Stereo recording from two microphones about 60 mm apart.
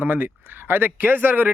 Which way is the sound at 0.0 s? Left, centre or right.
Right.